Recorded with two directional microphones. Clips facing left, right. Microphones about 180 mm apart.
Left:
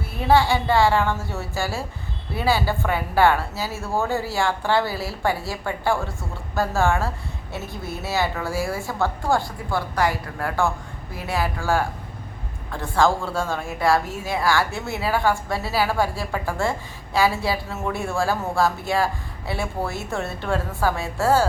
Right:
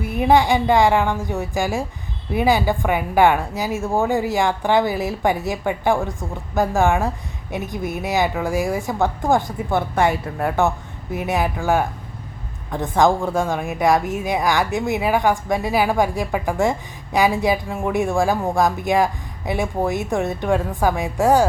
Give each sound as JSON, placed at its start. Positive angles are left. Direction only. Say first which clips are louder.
{"t": 0.0, "sound": "a woman's voice", "louder": "right 3 dB", "side_deg": -15}